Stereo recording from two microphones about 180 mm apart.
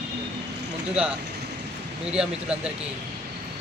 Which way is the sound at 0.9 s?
5° right (ahead or behind).